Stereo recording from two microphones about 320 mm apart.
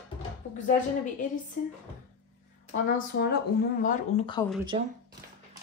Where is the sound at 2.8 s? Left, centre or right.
Left.